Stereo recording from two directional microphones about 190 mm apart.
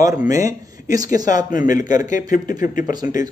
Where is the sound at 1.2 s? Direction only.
45° left (ahead or behind).